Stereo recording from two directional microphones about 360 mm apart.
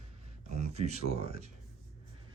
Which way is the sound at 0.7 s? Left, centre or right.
Centre.